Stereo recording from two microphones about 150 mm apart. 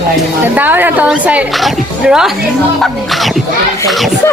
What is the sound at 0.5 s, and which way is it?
Speech, 10° right (ahead or behind).